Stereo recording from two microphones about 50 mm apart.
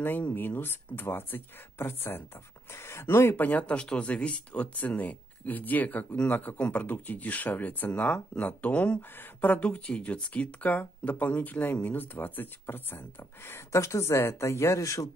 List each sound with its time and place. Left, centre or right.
0.0 s speech: left
3.3 s speech: left
13.7 s speech: left